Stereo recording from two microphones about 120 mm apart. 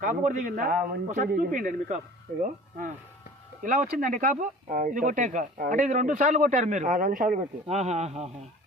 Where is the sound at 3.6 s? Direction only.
90° right.